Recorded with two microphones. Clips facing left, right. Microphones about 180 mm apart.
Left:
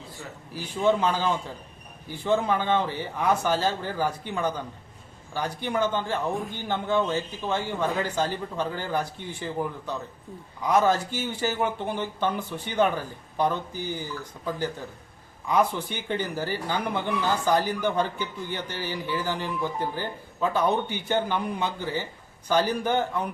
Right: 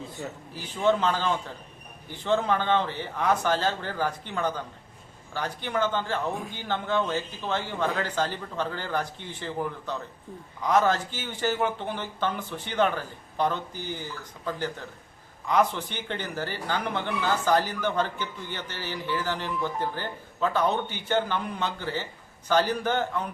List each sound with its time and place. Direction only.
0.2 s speech: 25° right (ahead or behind)
0.5 s speech: 10° left (ahead or behind)